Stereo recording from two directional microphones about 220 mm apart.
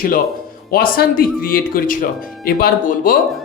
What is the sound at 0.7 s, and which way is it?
Speech, 40° left (ahead or behind).